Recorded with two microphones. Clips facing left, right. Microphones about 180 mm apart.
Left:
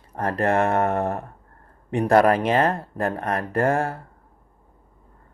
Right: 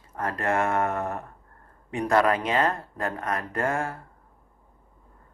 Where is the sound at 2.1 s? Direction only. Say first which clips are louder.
Left 5 dB; 35° left (ahead or behind).